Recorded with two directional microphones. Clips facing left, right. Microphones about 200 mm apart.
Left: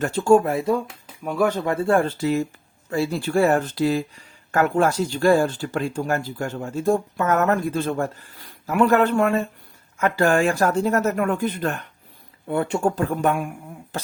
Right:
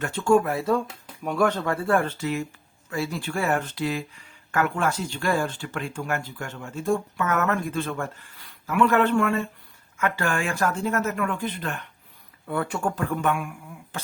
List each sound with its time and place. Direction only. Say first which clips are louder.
0.0 s speech: left 4 dB; 35° left (ahead or behind)
0.6 s speech: left 2 dB; 10° left (ahead or behind)
1.5 s speech: left 4 dB; 20° left (ahead or behind); by 11.8 s 45° left (ahead or behind)
12.5 s speech: left 5 dB; 25° left (ahead or behind)